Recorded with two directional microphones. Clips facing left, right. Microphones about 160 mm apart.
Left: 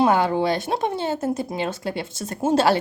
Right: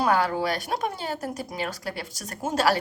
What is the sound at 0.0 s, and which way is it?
Speech, 20° left (ahead or behind).